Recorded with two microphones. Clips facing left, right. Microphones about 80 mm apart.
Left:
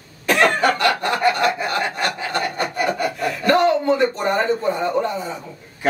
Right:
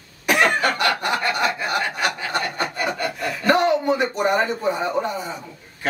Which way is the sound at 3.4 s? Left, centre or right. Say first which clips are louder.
Left 2 dB; centre.